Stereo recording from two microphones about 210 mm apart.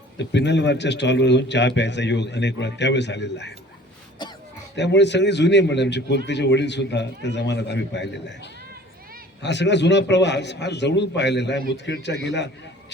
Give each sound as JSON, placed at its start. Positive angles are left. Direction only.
{"t": 0.2, "sound": "a man's voice", "side_deg": 55}
{"t": 4.2, "sound": "a sound", "side_deg": 20}
{"t": 4.7, "sound": "a man's voice", "side_deg": 55}